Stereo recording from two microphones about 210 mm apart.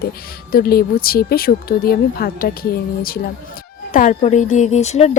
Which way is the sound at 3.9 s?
35° left (ahead or behind).